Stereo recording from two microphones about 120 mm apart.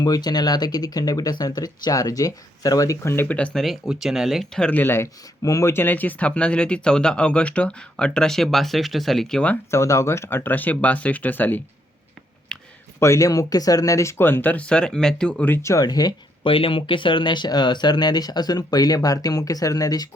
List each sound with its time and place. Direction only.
0.0 s speech: 35° left (ahead or behind); by 5.0 s 15° left (ahead or behind)
5.4 s speech: 25° left (ahead or behind); by 9.6 s 10° left (ahead or behind)
9.7 s speech: 25° left (ahead or behind)
12.5 s a sound: 5° left (ahead or behind)
13.0 s speech: 25° left (ahead or behind)